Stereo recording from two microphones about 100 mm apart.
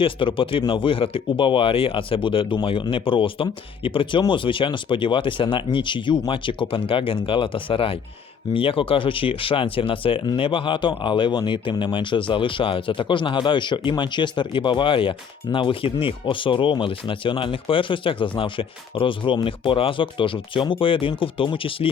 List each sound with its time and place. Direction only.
0.0 s speech: 60° left (ahead or behind)